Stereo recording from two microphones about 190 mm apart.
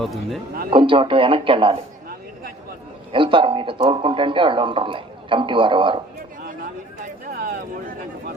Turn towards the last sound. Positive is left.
turn(degrees=-50)  # may be behind; listen again after turning